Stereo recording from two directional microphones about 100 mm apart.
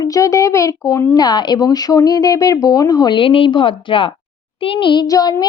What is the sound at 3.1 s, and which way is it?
A woman's voice, 60° left (ahead or behind).